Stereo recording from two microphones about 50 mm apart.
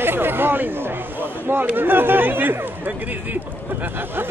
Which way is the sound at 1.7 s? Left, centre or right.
Right.